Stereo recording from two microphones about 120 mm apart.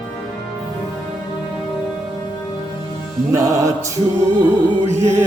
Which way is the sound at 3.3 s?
25° right (ahead or behind).